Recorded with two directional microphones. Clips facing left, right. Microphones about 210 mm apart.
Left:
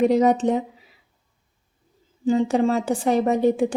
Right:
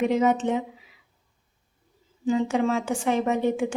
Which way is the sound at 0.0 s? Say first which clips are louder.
Left 4 dB; 35° left (ahead or behind).